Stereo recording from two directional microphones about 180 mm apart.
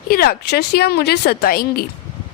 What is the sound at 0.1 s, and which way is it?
A woman's voice, 60° left (ahead or behind).